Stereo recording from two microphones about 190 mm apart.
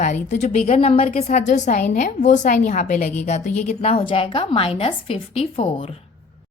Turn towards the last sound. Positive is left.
turn(degrees=30)  # may be behind; listen again after turning